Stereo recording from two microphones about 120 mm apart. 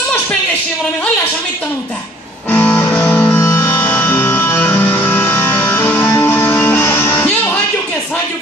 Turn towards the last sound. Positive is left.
turn(degrees=20)  # may be behind; listen again after turning